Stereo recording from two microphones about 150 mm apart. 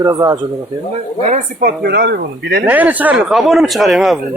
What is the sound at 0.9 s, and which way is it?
Speech, 50° right (ahead or behind).